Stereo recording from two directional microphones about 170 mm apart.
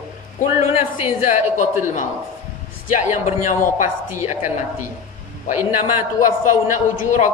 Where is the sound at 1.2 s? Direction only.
45° left (ahead or behind).